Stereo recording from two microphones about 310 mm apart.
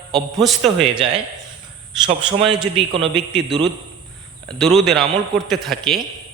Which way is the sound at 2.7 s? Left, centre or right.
Centre.